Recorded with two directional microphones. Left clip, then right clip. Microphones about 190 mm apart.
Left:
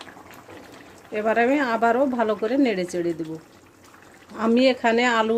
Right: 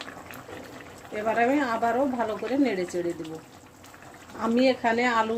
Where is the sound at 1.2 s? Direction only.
50° left (ahead or behind).